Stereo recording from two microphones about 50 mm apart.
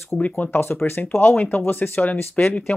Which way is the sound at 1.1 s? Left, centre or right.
Left.